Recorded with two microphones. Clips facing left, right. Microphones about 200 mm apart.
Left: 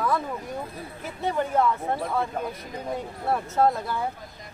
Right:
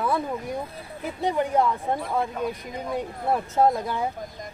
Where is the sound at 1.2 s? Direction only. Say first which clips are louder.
Right 1 dB; 15° right (ahead or behind).